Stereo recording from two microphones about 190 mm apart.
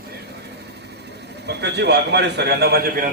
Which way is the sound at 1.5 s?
60° right (ahead or behind).